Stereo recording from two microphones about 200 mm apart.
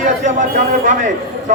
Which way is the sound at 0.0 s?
40° right (ahead or behind).